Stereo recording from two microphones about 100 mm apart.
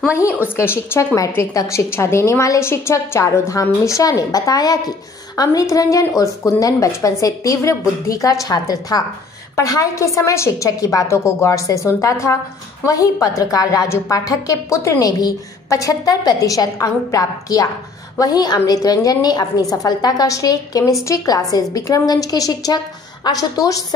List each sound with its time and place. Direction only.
0.6 s a woman's voice: 30° left (ahead or behind)